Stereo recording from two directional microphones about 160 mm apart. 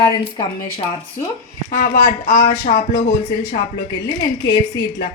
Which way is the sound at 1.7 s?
60° left (ahead or behind).